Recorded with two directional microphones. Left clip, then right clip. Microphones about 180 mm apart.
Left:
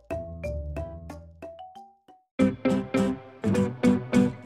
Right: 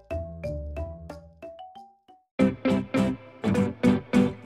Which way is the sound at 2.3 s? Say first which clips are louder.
Even; centre (ahead or behind).